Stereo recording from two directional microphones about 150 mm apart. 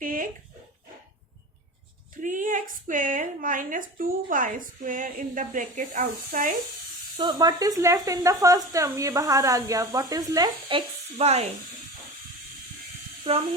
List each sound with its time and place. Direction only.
0.0 s dog: 65° right (ahead or behind)
2.2 s a woman's voice: 60° right (ahead or behind)
7.2 s speech: 30° right (ahead or behind)
11.2 s speech: 45° right (ahead or behind)